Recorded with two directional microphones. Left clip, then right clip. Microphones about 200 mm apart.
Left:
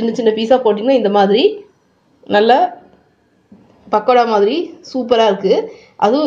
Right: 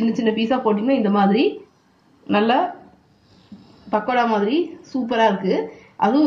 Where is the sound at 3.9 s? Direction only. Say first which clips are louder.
Left 7 dB; 30° left (ahead or behind).